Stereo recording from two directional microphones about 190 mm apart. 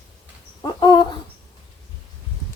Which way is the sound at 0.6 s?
20° left (ahead or behind).